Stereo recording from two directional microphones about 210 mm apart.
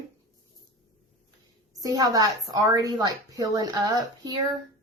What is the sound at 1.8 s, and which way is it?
A woman's voice, 15° right (ahead or behind).